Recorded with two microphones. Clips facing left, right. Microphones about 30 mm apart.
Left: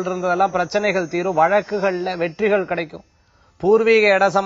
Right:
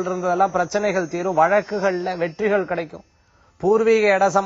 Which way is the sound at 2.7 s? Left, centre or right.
Left.